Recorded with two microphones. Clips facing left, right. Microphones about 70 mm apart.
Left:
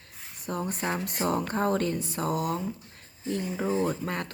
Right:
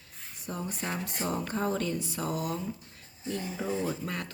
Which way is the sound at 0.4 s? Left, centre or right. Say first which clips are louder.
Left 5 dB; left.